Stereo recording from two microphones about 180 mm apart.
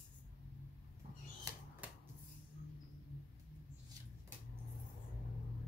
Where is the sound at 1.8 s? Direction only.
10° right (ahead or behind).